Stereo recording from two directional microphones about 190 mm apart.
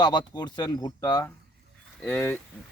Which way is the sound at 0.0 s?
20° left (ahead or behind).